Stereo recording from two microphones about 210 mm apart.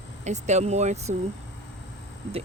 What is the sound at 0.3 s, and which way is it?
Speech, 35° right (ahead or behind).